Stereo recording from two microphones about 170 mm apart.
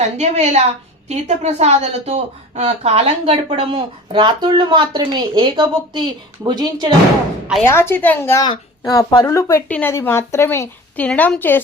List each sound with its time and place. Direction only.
0.2 s a woman's voice: 40° right (ahead or behind); by 6.9 s 25° right (ahead or behind)
7.6 s speech: 15° left (ahead or behind)